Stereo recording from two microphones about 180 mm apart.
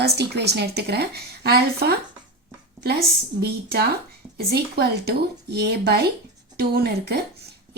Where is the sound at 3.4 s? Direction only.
60° right (ahead or behind).